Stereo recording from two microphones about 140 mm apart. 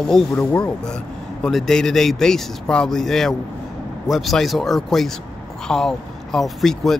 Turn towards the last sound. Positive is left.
turn(degrees=0)  # may be behind; listen again after turning